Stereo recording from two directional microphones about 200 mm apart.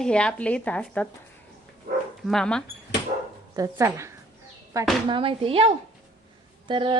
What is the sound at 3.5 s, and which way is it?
Speech, 15° right (ahead or behind).